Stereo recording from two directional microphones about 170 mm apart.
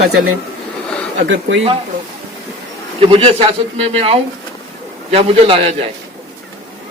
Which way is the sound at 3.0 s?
35° right (ahead or behind).